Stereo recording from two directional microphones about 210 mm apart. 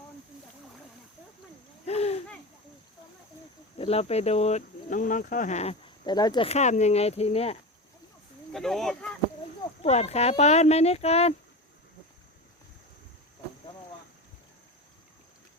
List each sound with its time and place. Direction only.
1.9 s a sound: 30° left (ahead or behind)
3.8 s speech: 30° left (ahead or behind)
6.1 s speech: 20° left (ahead or behind)
8.5 s speech: centre (ahead or behind)
9.8 s speech: 30° left (ahead or behind)